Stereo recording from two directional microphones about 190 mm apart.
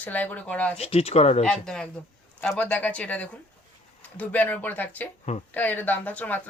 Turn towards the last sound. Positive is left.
turn(degrees=10)  # may be behind; listen again after turning